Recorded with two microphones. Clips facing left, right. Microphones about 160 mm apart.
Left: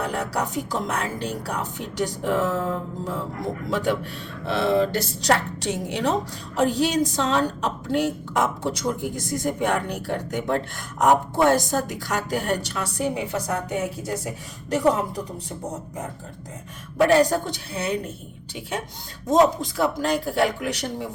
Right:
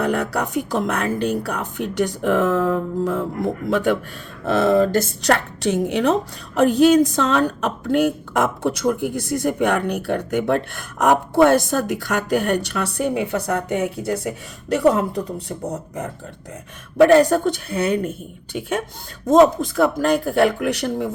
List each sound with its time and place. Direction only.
0.0 s a woman's voice: 60° right (ahead or behind)
4.4 s a woman's voice: 45° right (ahead or behind); by 15.5 s 65° right (ahead or behind)
17.1 s a woman's voice: 60° right (ahead or behind)
19.4 s a woman's voice: 55° right (ahead or behind)